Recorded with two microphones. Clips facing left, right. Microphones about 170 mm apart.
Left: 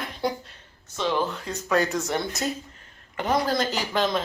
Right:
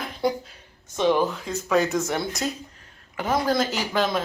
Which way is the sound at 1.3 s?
Centre (ahead or behind).